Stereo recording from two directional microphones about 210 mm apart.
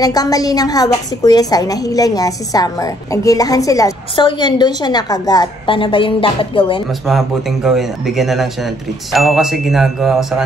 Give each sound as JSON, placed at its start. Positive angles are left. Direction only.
{"t": 0.0, "sound": "a woman's voice", "side_deg": 20}
{"t": 6.9, "sound": "speech", "side_deg": 0}